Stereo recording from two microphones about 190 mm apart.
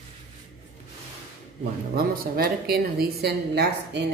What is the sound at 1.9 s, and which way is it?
A woman's voice, 50° right (ahead or behind).